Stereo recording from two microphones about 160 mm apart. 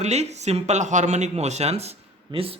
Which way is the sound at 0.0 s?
45° right (ahead or behind).